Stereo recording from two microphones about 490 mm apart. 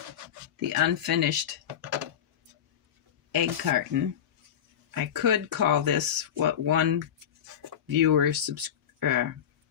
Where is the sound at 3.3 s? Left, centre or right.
Right.